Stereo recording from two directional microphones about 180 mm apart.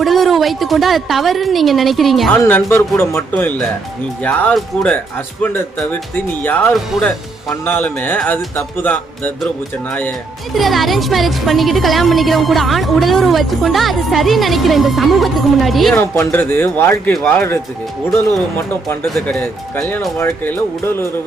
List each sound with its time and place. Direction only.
0.0 s speech: centre (ahead or behind)
2.4 s speech: 15° left (ahead or behind)
7.6 s speech: 10° left (ahead or behind)
10.6 s speech: centre (ahead or behind)
16.0 s speech: 10° left (ahead or behind)
19.0 s speech: centre (ahead or behind)